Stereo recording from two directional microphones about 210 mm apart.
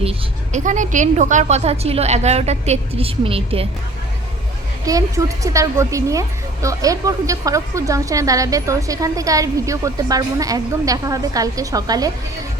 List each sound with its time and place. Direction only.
0.0 s a woman's voice: 30° right (ahead or behind)
4.9 s a woman's voice: 15° right (ahead or behind)